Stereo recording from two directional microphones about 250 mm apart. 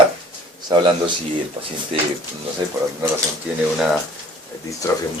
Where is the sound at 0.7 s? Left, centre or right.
Centre.